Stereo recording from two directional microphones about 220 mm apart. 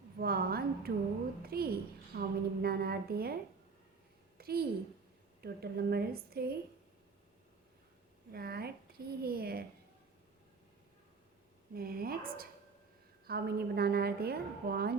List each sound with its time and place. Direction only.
0.2 s a woman's voice: 45° right (ahead or behind)
4.4 s a sound: 45° right (ahead or behind)
5.4 s a woman's voice: 45° right (ahead or behind)
8.3 s a woman's voice: 45° right (ahead or behind)
11.7 s a woman's voice: 45° right (ahead or behind)